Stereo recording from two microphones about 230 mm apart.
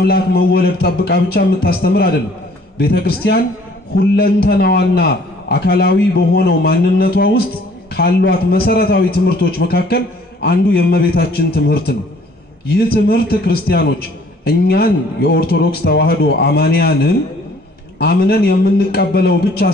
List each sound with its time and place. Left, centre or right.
0.0 s a man's voice: left